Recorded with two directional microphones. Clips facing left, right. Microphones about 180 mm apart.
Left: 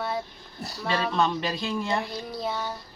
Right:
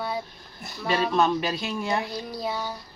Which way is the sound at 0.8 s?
5° right (ahead or behind).